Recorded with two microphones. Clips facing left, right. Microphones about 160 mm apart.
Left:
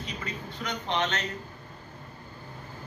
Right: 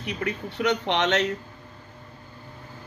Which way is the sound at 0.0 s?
70° right (ahead or behind).